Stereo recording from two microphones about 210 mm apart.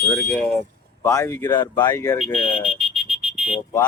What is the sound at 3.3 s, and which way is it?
Vehicle, 5° right (ahead or behind).